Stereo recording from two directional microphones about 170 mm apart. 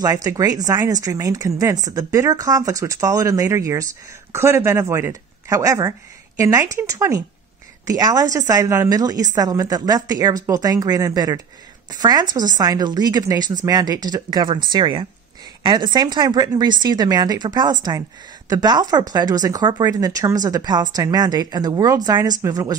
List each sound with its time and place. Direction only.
0.0 s speech: 20° right (ahead or behind)